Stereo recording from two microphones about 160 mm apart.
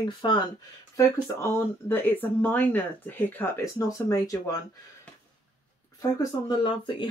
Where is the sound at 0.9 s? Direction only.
15° left (ahead or behind).